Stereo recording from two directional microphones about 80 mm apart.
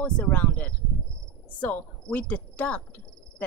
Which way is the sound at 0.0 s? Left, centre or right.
Centre.